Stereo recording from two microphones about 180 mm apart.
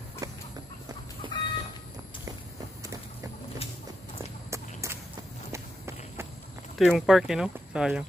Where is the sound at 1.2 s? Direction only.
25° right (ahead or behind).